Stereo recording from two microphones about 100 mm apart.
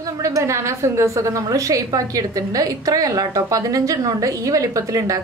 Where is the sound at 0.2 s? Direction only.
30° right (ahead or behind).